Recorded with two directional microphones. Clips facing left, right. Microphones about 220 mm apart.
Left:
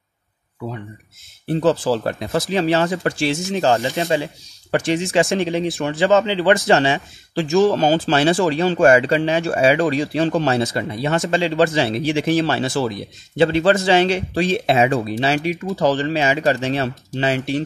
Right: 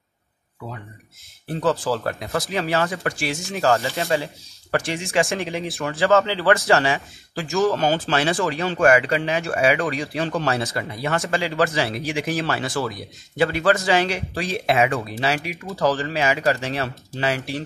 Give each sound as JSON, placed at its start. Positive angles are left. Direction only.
{"t": 1.5, "sound": "speech", "side_deg": 30}
{"t": 5.9, "sound": "speech", "side_deg": 15}